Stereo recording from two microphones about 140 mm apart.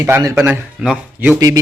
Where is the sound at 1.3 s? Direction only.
25° right (ahead or behind).